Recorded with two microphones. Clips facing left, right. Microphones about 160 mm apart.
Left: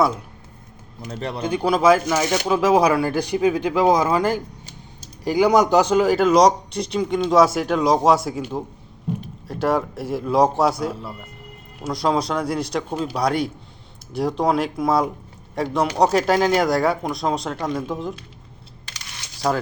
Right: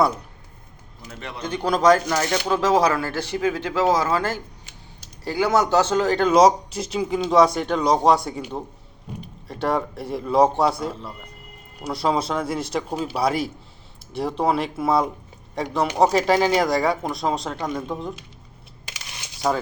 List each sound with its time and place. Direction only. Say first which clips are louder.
1.0 s a man's voice: left 7 dB; 35° left (ahead or behind)
1.5 s speech: left 1 dB; 10° left (ahead or behind)
19.4 s speech: left 1 dB; centre (ahead or behind)